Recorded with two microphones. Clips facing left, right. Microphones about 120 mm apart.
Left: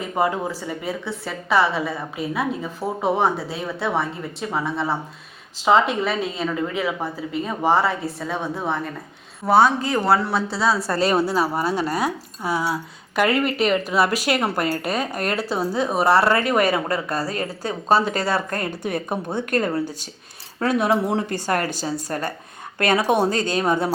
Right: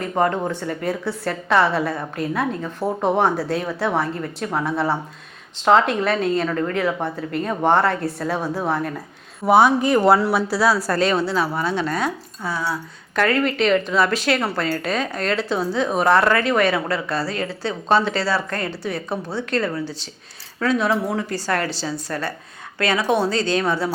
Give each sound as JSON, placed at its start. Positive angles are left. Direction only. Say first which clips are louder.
{"t": 0.0, "sound": "a woman's voice", "louder": "right 2 dB", "side_deg": 5}
{"t": 9.5, "sound": "speech", "louder": "right 2 dB", "side_deg": -15}
{"t": 10.9, "sound": "a woman's voice", "louder": "even", "side_deg": 5}
{"t": 16.9, "sound": "a woman's voice", "louder": "right 1 dB", "side_deg": 40}
{"t": 18.9, "sound": "a woman's voice", "louder": "left 1 dB", "side_deg": 15}
{"t": 20.8, "sound": "a woman's voice", "louder": "left 1 dB", "side_deg": 20}
{"t": 21.6, "sound": "a woman's voice", "louder": "even", "side_deg": 45}
{"t": 23.6, "sound": "speech", "louder": "left 1 dB", "side_deg": 20}